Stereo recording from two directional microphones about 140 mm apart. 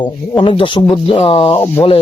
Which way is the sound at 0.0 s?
35° left (ahead or behind).